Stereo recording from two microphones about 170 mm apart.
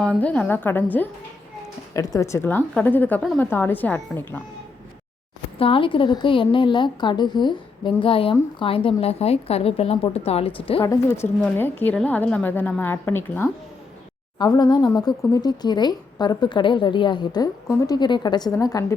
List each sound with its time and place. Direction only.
0.0 s a woman's voice: 5° left (ahead or behind)
5.5 s a woman's voice: 30° left (ahead or behind)
11.4 s a woman's voice: 10° left (ahead or behind)
14.3 s speech: 25° left (ahead or behind)